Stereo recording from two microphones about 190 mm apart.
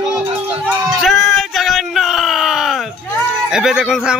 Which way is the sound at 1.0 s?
Centre (ahead or behind).